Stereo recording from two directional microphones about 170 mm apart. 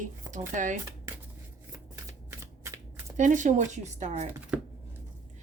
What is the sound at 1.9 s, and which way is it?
Shuffling cards, 15° right (ahead or behind).